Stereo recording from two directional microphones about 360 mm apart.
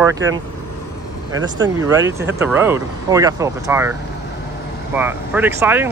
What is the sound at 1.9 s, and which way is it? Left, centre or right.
Speech, centre.